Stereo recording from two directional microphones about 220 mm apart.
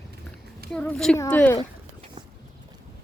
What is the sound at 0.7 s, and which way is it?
Speech, 5° left (ahead or behind).